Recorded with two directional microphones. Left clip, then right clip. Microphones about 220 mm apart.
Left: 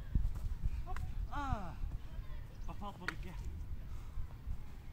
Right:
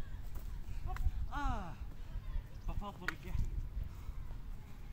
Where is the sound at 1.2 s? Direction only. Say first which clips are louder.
Even; 10° right (ahead or behind).